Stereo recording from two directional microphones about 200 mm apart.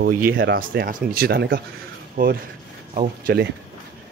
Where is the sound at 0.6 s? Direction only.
45° right (ahead or behind).